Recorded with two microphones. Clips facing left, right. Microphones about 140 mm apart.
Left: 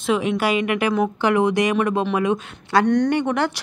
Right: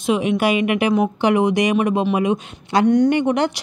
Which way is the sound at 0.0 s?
15° right (ahead or behind).